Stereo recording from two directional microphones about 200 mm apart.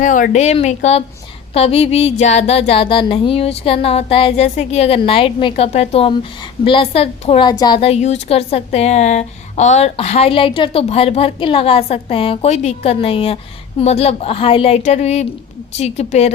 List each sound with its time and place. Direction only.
0.0 s a woman's voice: 40° left (ahead or behind)